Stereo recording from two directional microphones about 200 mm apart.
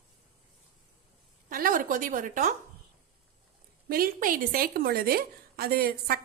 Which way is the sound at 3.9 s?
45° right (ahead or behind).